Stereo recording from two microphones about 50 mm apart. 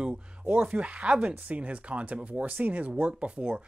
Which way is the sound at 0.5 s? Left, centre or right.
Right.